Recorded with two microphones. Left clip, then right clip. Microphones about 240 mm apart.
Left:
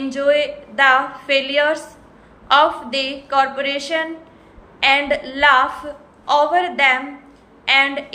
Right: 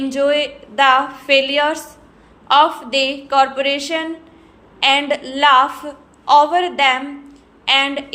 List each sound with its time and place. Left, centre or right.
0.1 s a woman's voice: centre